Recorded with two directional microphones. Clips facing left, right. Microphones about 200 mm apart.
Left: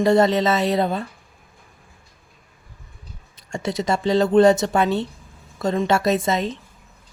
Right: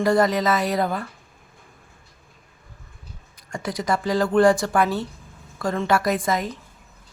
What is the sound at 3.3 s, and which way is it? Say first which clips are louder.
Speech: left 4 dB; 25° left (ahead or behind).